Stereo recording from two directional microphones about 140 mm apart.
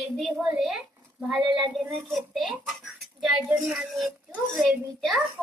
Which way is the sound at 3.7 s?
5° right (ahead or behind).